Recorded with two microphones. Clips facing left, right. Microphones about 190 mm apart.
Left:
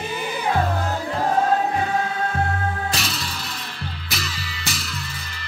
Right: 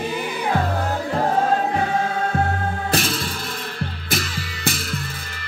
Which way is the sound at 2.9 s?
50° right (ahead or behind).